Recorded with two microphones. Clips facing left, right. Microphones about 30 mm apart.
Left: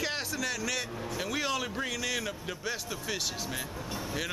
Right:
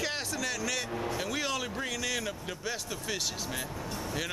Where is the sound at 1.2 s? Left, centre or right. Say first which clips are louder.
Left 5 dB; centre.